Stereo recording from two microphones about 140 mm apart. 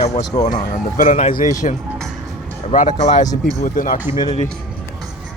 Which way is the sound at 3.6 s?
75° left (ahead or behind).